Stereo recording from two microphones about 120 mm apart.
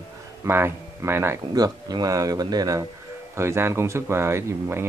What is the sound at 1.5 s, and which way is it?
Speech, 35° right (ahead or behind).